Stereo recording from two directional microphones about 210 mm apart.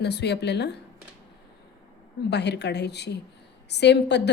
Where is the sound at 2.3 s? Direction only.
55° left (ahead or behind).